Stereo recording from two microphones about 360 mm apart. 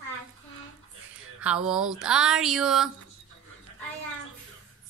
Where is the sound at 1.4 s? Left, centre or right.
Centre.